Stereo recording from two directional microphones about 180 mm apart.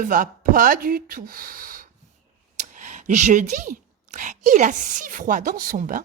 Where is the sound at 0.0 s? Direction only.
50° right (ahead or behind).